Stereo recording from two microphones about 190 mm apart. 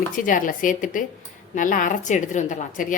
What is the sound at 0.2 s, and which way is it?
A woman's voice, 45° left (ahead or behind).